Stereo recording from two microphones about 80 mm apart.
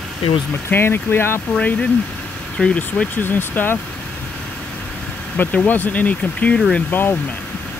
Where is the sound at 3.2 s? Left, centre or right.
Left.